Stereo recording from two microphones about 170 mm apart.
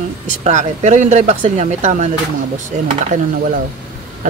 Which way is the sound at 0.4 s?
45° right (ahead or behind).